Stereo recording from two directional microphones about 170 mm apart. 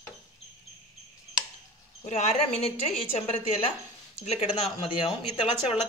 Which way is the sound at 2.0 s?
40° left (ahead or behind).